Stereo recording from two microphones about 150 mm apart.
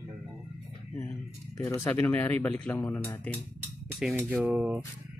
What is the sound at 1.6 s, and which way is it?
Speech, 20° left (ahead or behind).